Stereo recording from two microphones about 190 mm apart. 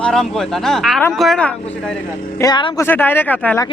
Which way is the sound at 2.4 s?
25° left (ahead or behind).